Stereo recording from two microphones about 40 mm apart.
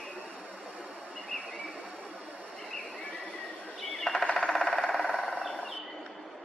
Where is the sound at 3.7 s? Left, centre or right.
Centre.